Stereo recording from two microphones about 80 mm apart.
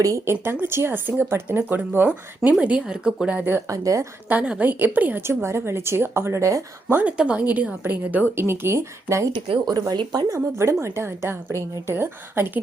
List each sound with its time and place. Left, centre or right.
0.0 s a woman's voice: right
0.6 s a woman's voice: right
2.6 s speech: centre
3.3 s a woman's voice: right
3.7 s a woman's voice: right
4.3 s a woman's voice: centre; by 6.6 s right
6.8 s a woman's voice: centre
8.4 s a woman's voice: right
9.3 s a woman's voice: right